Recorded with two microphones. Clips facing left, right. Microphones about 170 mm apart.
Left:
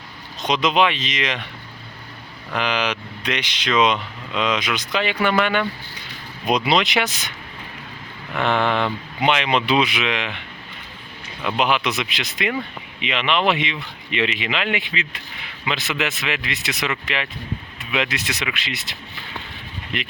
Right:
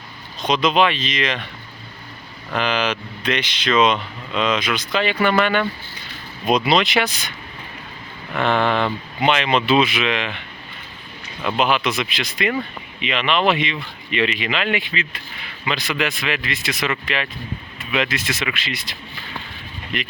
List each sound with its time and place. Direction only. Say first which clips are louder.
0.4 s speech: right 1 dB; 20° left (ahead or behind)
2.5 s speech: right 2 dB; 15° left (ahead or behind)
8.4 s speech: right 1 dB; 15° left (ahead or behind)
11.5 s speech: right 1 dB; 15° left (ahead or behind)